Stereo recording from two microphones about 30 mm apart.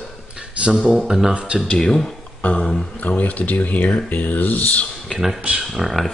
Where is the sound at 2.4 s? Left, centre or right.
Left.